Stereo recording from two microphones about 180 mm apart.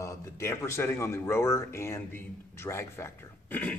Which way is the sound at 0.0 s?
15° left (ahead or behind).